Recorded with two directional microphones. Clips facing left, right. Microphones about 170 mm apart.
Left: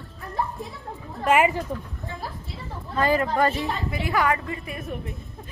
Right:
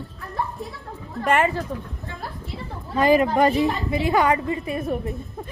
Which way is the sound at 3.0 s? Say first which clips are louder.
Right 4 dB; 15° right (ahead or behind).